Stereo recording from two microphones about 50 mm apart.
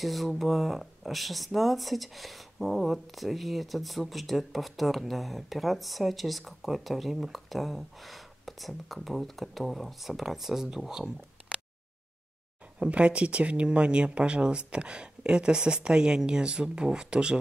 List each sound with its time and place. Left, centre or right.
0.0 s speech: centre
12.7 s speech: right